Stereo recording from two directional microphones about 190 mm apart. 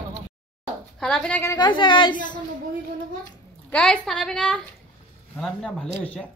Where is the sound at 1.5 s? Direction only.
25° left (ahead or behind).